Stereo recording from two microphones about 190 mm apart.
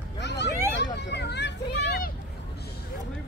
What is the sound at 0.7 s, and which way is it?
Children playing, 65° left (ahead or behind).